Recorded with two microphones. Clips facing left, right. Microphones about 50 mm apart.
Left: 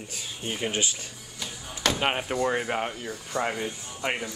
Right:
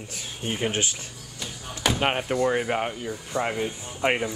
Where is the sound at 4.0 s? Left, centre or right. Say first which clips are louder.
Right 6 dB; right.